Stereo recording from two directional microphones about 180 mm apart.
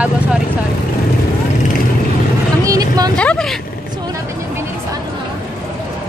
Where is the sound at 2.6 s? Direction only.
20° right (ahead or behind).